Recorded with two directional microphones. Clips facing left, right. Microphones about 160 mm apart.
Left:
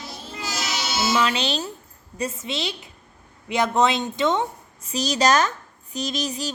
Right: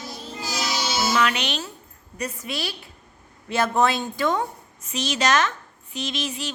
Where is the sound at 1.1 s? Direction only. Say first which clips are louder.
Left 3 dB; 30° left (ahead or behind).